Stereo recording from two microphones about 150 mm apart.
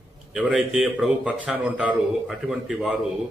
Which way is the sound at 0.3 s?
5° right (ahead or behind).